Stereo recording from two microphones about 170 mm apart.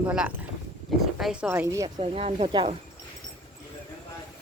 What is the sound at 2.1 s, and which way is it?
Speech, 35° right (ahead or behind).